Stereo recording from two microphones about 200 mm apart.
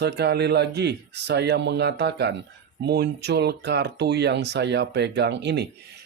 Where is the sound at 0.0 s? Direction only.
55° right (ahead or behind).